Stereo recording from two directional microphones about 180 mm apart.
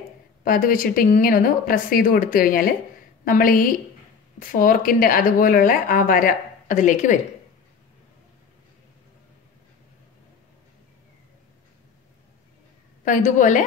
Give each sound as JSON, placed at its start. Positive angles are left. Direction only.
{"t": 0.4, "sound": "a woman's voice", "side_deg": 50}
{"t": 13.0, "sound": "a woman's voice", "side_deg": 45}